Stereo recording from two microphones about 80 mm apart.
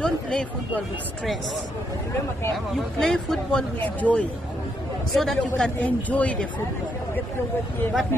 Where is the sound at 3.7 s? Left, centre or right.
Centre.